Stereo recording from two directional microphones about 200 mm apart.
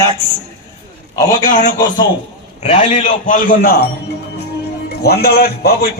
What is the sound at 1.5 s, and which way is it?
A man's voice, 40° left (ahead or behind).